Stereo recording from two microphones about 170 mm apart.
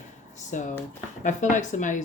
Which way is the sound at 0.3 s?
45° left (ahead or behind).